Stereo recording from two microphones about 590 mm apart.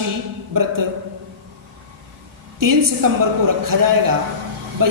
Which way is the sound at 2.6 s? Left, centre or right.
Right.